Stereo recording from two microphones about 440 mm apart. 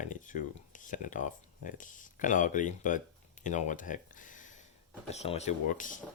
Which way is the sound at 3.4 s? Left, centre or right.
Centre.